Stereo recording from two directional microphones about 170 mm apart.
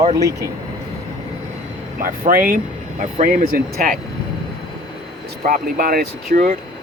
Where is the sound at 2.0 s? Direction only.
55° right (ahead or behind).